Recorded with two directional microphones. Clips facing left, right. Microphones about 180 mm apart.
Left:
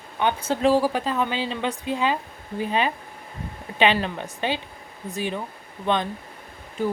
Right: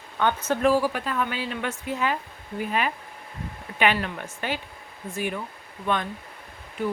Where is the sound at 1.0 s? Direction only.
25° left (ahead or behind).